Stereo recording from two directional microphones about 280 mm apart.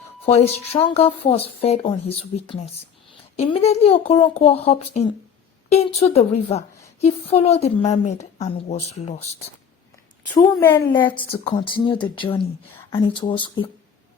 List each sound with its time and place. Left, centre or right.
0.3 s speech: left
10.2 s a woman's voice: centre